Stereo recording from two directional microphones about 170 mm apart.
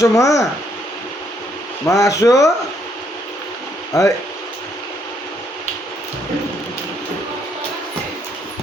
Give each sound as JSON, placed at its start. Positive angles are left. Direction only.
{"t": 0.0, "sound": "speech", "side_deg": 20}
{"t": 1.8, "sound": "speech", "side_deg": 20}
{"t": 3.9, "sound": "speech", "side_deg": 20}